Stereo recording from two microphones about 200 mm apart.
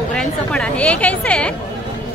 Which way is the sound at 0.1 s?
5° left (ahead or behind).